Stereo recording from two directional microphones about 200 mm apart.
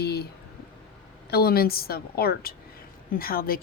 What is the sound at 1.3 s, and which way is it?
Speech, 50° left (ahead or behind).